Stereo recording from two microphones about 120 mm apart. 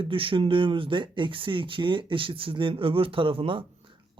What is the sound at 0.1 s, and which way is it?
Speech, 45° right (ahead or behind).